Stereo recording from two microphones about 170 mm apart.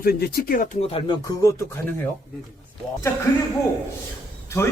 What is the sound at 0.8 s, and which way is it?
Speech, 30° left (ahead or behind).